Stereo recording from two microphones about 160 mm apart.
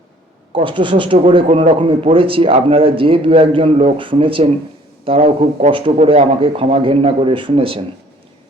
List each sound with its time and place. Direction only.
0.5 s a man's voice: 30° right (ahead or behind)
5.2 s speech: 50° right (ahead or behind)
5.7 s a man's voice: 35° right (ahead or behind)